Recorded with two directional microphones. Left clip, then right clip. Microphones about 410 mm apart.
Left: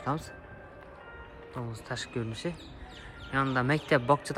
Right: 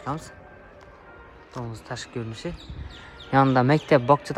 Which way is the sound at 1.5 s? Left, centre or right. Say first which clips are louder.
Right 3 dB; centre.